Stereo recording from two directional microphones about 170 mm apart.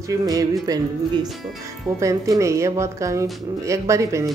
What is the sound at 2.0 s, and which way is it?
Speech, 20° right (ahead or behind).